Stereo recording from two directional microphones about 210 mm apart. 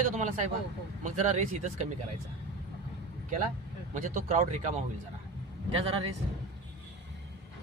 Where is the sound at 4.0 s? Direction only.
35° right (ahead or behind).